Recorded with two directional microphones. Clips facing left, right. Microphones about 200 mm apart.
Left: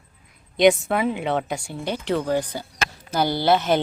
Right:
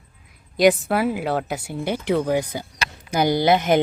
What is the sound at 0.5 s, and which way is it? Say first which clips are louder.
Speech: even; centre (ahead or behind).